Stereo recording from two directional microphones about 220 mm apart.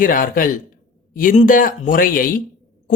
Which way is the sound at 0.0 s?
40° left (ahead or behind).